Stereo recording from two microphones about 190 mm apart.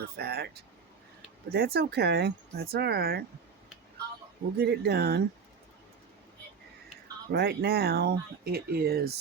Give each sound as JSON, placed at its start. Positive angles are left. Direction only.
{"t": 0.0, "sound": "speech", "side_deg": -55}
{"t": 4.5, "sound": "speech", "side_deg": -60}
{"t": 7.3, "sound": "speech", "side_deg": -60}